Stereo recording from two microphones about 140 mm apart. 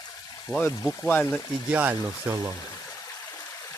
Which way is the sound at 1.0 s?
15° left (ahead or behind).